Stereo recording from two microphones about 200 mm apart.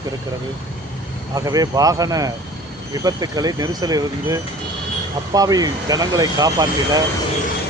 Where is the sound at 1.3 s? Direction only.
20° right (ahead or behind).